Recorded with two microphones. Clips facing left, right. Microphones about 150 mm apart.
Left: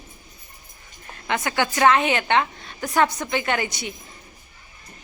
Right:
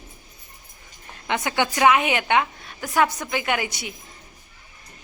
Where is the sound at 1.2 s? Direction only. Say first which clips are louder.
Even; 15° right (ahead or behind).